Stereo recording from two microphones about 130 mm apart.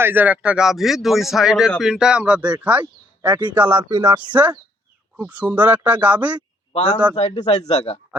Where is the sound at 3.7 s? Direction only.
35° right (ahead or behind).